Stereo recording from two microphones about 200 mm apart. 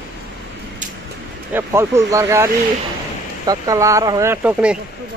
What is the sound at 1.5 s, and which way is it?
Speech, 10° right (ahead or behind).